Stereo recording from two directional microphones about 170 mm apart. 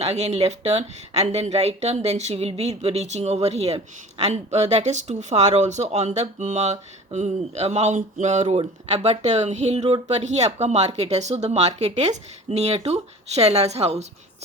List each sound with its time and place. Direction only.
0.0 s speech: 40° right (ahead or behind)